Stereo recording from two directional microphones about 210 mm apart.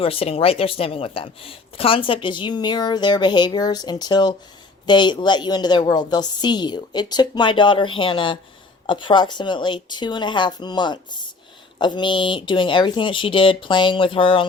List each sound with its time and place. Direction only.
0.0 s speech: 25° left (ahead or behind)